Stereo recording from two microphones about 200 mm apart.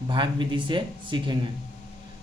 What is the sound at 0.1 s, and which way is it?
Speech, 25° right (ahead or behind).